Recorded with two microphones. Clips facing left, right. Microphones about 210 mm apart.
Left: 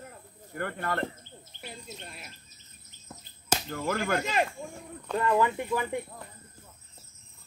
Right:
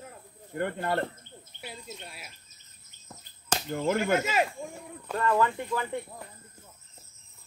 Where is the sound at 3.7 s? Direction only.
20° right (ahead or behind).